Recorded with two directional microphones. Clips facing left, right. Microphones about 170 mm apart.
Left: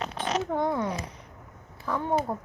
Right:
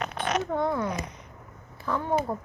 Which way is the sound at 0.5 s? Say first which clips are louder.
Left 1 dB; 15° left (ahead or behind).